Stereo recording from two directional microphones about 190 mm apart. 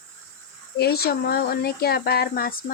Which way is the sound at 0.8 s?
55° left (ahead or behind).